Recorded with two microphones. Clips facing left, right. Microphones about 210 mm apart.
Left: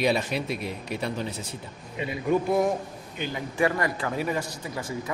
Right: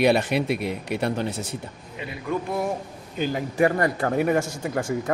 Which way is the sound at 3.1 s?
40° right (ahead or behind).